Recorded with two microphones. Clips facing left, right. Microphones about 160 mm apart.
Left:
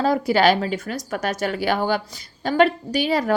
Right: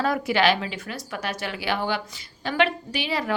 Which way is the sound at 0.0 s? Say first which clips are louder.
Left 4 dB; 35° left (ahead or behind).